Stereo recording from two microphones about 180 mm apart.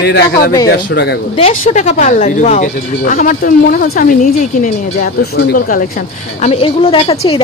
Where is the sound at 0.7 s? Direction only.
65° left (ahead or behind).